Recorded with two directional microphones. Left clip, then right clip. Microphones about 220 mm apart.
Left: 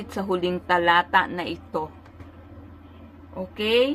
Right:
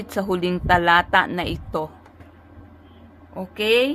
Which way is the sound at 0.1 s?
45° right (ahead or behind).